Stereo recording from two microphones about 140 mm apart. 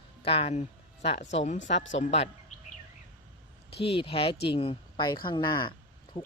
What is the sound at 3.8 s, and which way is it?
Speech, 40° left (ahead or behind).